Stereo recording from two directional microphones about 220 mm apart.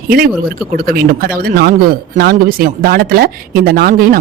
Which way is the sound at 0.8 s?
40° right (ahead or behind).